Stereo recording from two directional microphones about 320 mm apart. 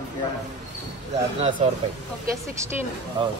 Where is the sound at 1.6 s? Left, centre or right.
Centre.